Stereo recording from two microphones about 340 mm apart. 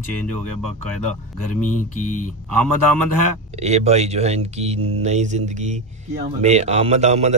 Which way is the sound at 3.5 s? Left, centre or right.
Centre.